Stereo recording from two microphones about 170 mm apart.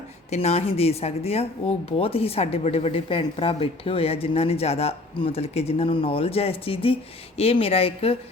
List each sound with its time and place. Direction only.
0.3 s speech: 35° left (ahead or behind)